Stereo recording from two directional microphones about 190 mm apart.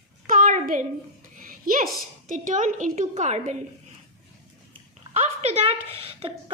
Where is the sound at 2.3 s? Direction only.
40° right (ahead or behind).